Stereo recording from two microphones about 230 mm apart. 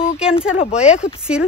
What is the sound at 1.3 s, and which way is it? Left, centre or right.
Speech, centre.